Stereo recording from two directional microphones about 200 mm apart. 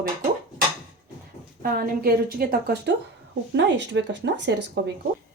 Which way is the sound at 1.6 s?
45° right (ahead or behind).